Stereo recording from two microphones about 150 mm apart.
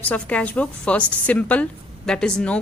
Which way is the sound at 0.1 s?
10° left (ahead or behind).